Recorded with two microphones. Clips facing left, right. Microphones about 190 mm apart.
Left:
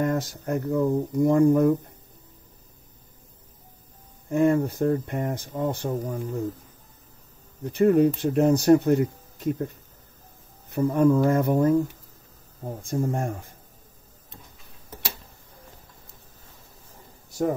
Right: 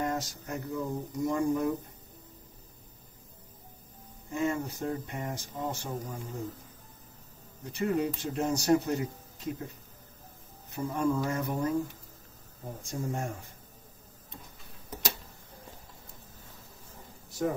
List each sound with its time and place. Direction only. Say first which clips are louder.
0.0 s speech: left 7 dB; 55° left (ahead or behind)
4.3 s speech: left 10 dB; 55° left (ahead or behind)
7.6 s speech: left 11 dB; 55° left (ahead or behind)
10.7 s speech: left 10 dB; 55° left (ahead or behind)
12.6 s speech: left 8 dB; 55° left (ahead or behind)